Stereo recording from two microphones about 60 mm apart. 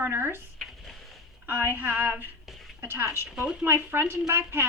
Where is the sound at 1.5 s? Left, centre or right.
Right.